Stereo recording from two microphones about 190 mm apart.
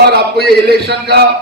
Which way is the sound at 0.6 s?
60° right (ahead or behind).